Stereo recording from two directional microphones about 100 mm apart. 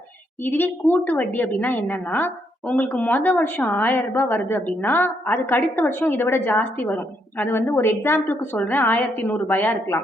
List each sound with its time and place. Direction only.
0.4 s a woman's voice: 20° left (ahead or behind)